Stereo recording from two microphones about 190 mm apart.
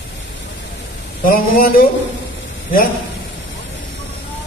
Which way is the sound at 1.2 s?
50° left (ahead or behind).